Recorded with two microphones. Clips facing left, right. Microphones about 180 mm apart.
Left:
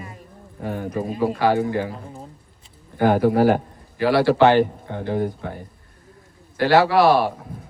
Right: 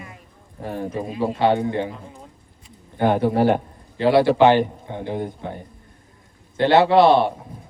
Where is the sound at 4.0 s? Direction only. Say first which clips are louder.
Right 1 dB; 20° right (ahead or behind).